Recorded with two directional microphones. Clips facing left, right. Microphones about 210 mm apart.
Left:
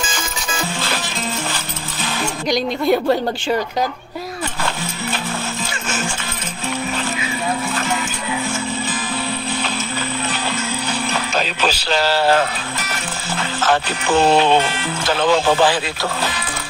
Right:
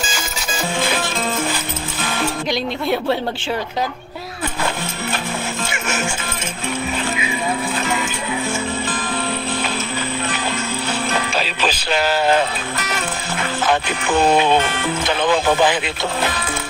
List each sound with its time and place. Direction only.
2.9 s speech: centre (ahead or behind)
11.3 s music: 5° right (ahead or behind)
12.0 s speech: 20° right (ahead or behind)
14.3 s speech: 10° right (ahead or behind)